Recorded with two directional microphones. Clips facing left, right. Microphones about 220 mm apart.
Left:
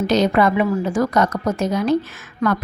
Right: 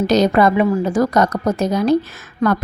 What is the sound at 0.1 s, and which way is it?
A woman's voice, 40° right (ahead or behind).